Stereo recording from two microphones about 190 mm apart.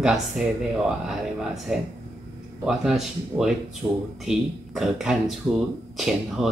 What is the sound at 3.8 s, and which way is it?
Speech, 15° right (ahead or behind).